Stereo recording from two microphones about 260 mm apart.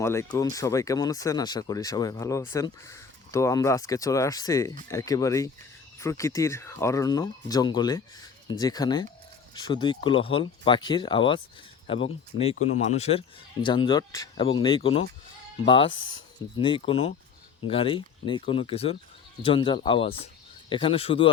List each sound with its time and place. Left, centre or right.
0.0 s a man's voice: centre